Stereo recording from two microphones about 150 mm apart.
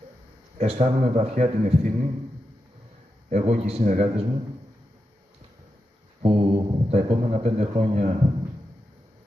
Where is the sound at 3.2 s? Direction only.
45° right (ahead or behind).